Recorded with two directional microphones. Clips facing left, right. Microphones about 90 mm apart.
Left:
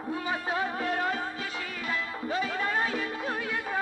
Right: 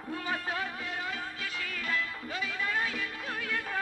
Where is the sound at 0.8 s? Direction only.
50° left (ahead or behind).